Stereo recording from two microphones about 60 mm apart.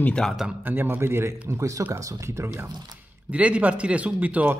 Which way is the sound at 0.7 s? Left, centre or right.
Right.